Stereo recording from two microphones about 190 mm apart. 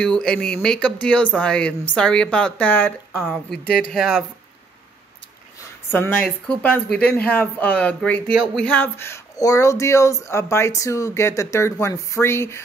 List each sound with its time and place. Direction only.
0.0 s speech: 5° left (ahead or behind)
5.9 s speech: 10° left (ahead or behind)